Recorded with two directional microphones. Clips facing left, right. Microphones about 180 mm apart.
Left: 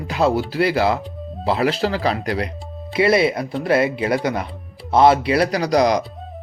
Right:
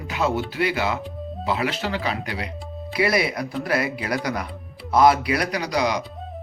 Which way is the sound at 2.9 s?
25° left (ahead or behind).